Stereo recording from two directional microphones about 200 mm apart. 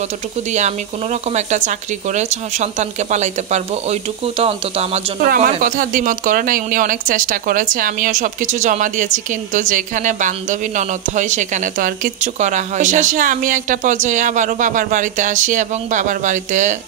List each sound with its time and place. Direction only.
0.5 s speech: 35° right (ahead or behind)
5.2 s speech: 45° right (ahead or behind)